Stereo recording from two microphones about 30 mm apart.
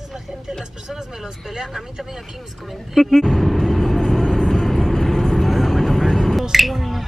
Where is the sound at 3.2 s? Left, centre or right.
Centre.